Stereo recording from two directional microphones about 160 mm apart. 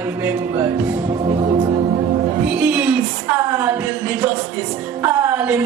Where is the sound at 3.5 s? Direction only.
10° right (ahead or behind).